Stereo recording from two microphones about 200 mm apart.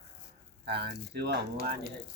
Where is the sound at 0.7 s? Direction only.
55° right (ahead or behind).